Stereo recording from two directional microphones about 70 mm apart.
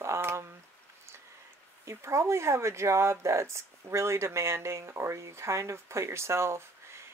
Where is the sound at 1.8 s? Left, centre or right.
Right.